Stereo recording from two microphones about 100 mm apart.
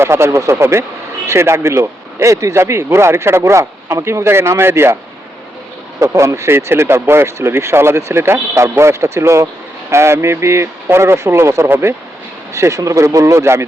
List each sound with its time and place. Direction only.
0.0 s speech: 25° right (ahead or behind)
6.0 s speech: 30° right (ahead or behind)